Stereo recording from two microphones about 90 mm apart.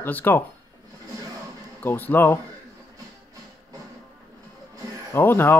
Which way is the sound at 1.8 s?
20° left (ahead or behind).